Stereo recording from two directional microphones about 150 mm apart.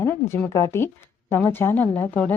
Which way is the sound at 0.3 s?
15° left (ahead or behind).